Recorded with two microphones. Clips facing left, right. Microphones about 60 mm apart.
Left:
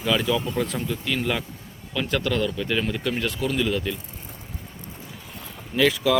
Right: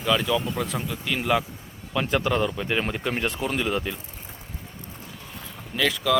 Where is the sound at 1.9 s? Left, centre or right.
Right.